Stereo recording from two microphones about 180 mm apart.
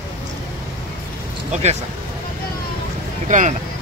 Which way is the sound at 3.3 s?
45° right (ahead or behind).